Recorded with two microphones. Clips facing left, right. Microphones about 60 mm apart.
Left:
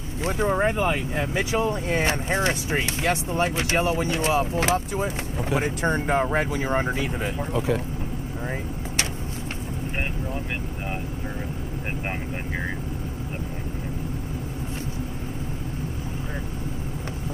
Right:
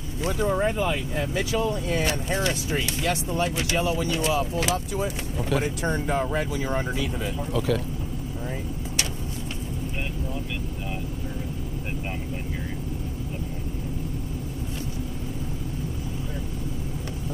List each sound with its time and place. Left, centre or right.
0.2 s speech: left